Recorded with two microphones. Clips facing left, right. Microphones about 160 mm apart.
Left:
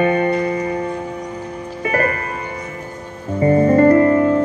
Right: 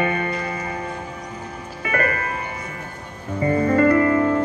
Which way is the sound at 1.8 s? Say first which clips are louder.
Left 4 dB; 35° left (ahead or behind).